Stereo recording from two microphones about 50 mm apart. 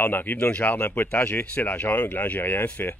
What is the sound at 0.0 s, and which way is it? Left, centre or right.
Speech, left.